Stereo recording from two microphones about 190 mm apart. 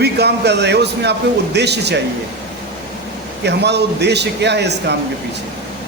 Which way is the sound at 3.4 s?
65° right (ahead or behind).